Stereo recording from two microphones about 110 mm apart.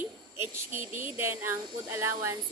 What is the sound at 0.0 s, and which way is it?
A woman's voice, 20° right (ahead or behind).